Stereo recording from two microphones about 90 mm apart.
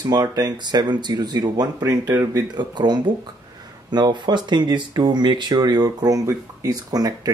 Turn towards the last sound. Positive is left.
turn(degrees=-45)  # may be behind; listen again after turning